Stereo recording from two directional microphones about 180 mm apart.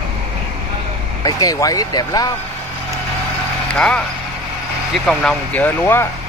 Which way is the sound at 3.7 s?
5° left (ahead or behind).